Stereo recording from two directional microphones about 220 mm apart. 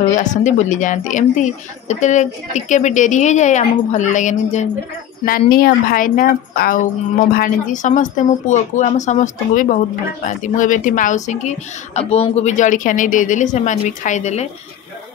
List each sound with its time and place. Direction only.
0.1 s speech: 35° left (ahead or behind)